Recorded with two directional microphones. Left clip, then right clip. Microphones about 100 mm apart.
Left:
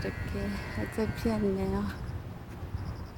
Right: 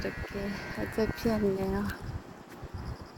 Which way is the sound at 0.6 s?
20° left (ahead or behind).